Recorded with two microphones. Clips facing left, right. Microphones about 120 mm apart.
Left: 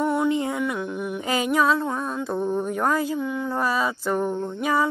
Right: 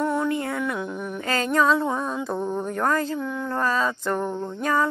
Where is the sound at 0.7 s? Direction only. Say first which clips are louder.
Left 1 dB; 5° left (ahead or behind).